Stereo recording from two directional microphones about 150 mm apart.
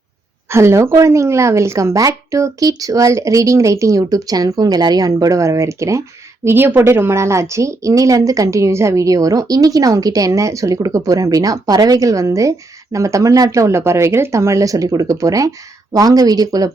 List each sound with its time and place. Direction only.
0.5 s a woman's voice: 20° right (ahead or behind)